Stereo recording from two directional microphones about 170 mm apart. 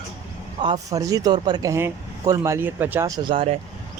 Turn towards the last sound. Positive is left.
turn(degrees=-30)  # may be behind; listen again after turning